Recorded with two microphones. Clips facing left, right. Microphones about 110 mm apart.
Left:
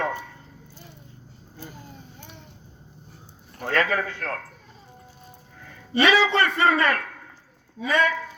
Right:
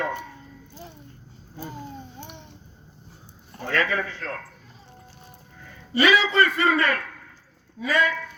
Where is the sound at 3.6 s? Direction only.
55° left (ahead or behind).